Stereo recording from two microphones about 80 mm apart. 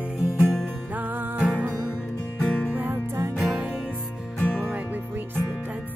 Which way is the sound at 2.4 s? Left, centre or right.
Centre.